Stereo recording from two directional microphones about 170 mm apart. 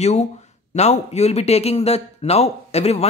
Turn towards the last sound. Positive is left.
turn(degrees=40)  # may be behind; listen again after turning